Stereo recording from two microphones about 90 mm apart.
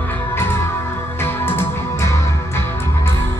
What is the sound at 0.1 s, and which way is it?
Music, 25° left (ahead or behind).